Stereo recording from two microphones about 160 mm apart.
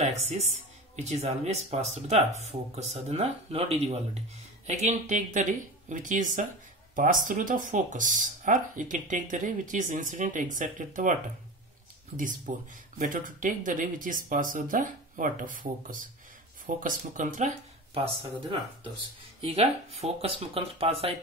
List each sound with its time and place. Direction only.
0.9 s speech: 45° right (ahead or behind)
12.2 s speech: 55° right (ahead or behind)
16.6 s speech: 55° right (ahead or behind)
17.9 s speech: 35° right (ahead or behind)